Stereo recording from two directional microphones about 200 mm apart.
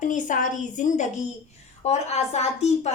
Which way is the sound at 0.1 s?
40° left (ahead or behind).